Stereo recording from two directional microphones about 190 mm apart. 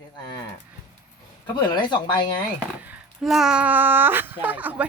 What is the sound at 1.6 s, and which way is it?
Speech, 25° left (ahead or behind).